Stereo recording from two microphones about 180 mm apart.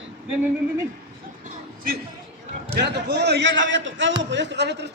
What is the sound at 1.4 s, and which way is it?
Music, 50° right (ahead or behind).